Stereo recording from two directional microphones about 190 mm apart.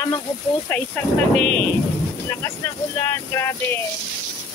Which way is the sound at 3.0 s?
15° left (ahead or behind).